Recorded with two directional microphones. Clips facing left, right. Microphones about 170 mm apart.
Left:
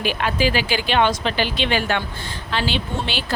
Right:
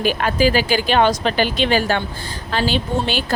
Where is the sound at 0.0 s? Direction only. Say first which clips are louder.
Right 4 dB; 45° right (ahead or behind).